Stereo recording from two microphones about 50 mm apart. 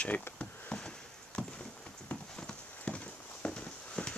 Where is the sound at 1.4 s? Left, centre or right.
Centre.